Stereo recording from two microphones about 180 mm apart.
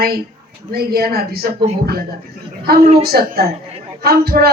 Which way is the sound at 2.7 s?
60° right (ahead or behind).